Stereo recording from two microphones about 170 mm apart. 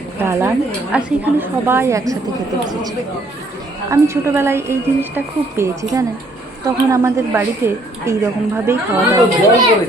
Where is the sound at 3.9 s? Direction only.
15° right (ahead or behind).